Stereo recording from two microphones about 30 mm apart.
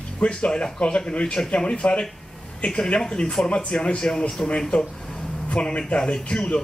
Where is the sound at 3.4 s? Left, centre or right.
Left.